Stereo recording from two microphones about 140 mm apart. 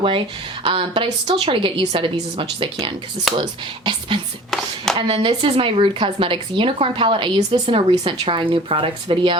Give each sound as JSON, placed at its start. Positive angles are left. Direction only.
{"t": 0.6, "sound": "speech", "side_deg": -40}
{"t": 3.3, "sound": "speech", "side_deg": -35}
{"t": 4.5, "sound": "a sound", "side_deg": 0}
{"t": 4.9, "sound": "speech", "side_deg": -45}